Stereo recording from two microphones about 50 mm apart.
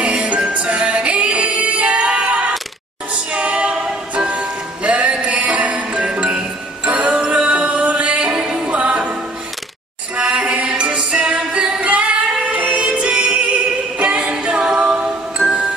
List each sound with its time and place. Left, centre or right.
0.0 s music: right
10.1 s music: right